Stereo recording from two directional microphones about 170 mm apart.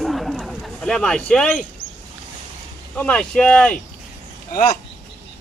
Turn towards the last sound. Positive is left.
turn(degrees=60)  # may be behind; listen again after turning